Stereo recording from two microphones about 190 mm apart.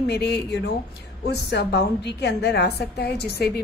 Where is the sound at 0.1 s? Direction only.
60° left (ahead or behind).